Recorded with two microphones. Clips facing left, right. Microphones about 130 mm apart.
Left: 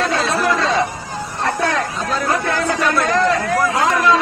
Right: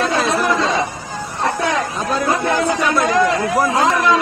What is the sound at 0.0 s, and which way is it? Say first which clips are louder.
Chatter: right 1 dB; 15° right (ahead or behind).